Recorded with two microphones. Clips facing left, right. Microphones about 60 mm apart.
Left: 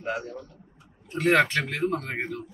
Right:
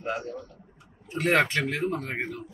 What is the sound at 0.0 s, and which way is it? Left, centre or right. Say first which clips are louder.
Speech: left 1 dB; centre.